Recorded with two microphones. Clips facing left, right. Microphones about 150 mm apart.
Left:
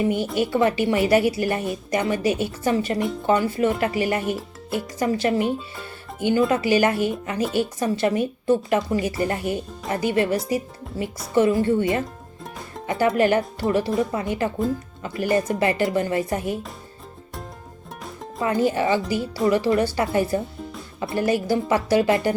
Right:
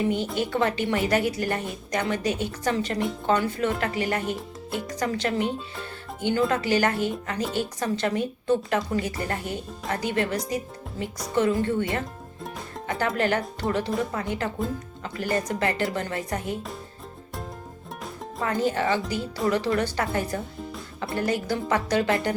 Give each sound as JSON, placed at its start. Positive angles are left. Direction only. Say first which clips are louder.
{"t": 0.1, "sound": "speech", "louder": "left 4 dB", "side_deg": 10}
{"t": 12.4, "sound": "music", "louder": "even", "side_deg": 0}
{"t": 13.1, "sound": "speech", "louder": "left 6 dB", "side_deg": 10}
{"t": 18.0, "sound": "music", "louder": "left 2 dB", "side_deg": 0}
{"t": 18.5, "sound": "speech", "louder": "left 4 dB", "side_deg": 10}